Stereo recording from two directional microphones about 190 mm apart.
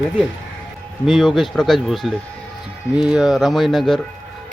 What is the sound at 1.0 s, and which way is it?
Speech, centre (ahead or behind).